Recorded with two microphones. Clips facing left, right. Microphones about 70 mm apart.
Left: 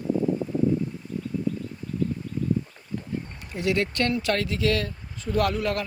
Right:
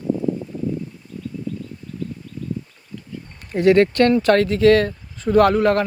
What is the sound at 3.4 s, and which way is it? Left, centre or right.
Speech, right.